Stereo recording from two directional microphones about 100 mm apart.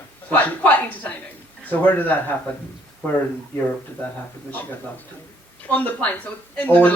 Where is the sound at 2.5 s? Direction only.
15° left (ahead or behind).